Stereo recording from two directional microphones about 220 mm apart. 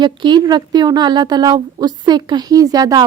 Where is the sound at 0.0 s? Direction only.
20° right (ahead or behind).